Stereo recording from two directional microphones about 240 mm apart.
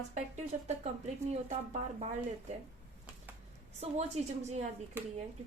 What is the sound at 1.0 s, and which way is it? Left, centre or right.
A woman's voice, right.